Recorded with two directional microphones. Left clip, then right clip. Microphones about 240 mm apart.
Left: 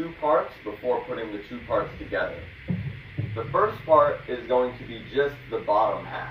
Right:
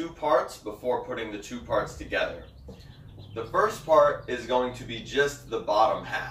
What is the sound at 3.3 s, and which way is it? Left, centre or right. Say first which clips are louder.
Speech: left 1 dB; right.